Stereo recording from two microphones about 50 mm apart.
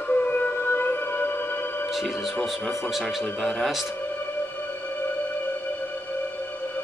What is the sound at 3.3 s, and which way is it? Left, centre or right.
Speech, centre.